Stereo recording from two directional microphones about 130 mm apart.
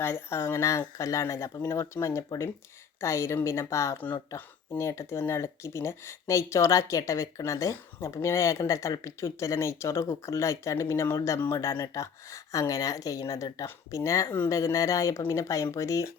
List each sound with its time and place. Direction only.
0.0 s speech: 20° left (ahead or behind)